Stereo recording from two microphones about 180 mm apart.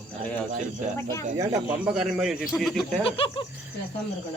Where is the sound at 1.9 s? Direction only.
5° right (ahead or behind).